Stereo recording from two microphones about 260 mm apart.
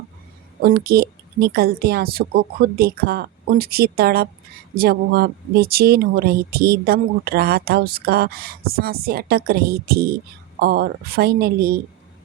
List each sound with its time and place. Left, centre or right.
0.6 s speech: right